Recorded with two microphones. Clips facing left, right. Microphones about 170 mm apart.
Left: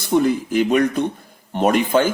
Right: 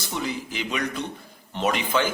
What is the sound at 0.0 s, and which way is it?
Speech, 50° left (ahead or behind).